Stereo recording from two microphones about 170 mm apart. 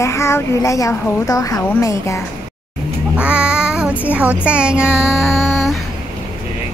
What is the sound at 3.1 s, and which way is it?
Child singing, 5° right (ahead or behind).